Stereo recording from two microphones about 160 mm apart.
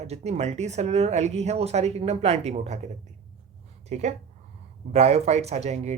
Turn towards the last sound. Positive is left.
turn(degrees=-45)  # may be behind; listen again after turning